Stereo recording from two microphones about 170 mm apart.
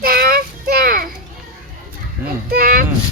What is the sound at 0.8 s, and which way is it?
Children playing, 60° right (ahead or behind).